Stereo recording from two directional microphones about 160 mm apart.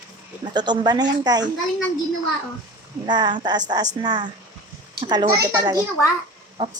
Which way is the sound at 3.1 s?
25° right (ahead or behind).